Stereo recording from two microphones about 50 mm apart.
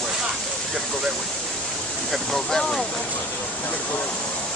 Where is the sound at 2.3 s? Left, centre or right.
Centre.